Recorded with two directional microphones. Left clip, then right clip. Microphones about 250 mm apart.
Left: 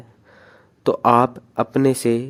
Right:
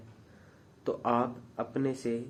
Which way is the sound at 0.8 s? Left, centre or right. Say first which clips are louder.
Left 14 dB; left.